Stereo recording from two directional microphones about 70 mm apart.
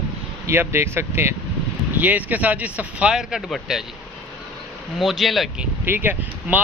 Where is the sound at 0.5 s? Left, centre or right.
Right.